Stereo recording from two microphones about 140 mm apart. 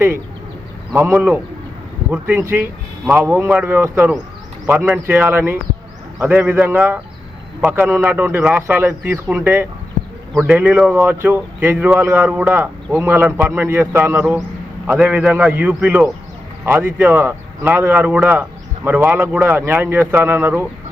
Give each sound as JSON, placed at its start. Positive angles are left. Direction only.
{"t": 0.9, "sound": "speech", "side_deg": -15}